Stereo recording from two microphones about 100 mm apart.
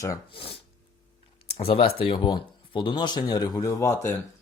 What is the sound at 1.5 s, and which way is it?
Speech, 70° left (ahead or behind).